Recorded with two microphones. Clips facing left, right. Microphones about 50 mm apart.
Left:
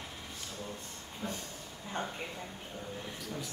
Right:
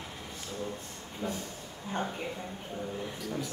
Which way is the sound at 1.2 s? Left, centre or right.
Right.